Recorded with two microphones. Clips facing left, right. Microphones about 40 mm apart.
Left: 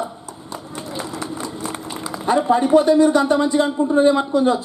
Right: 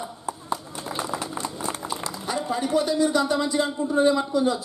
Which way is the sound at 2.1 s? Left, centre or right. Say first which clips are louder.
Left 13 dB; left.